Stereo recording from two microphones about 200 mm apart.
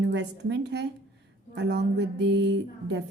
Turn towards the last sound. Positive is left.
turn(degrees=-60)  # may be behind; listen again after turning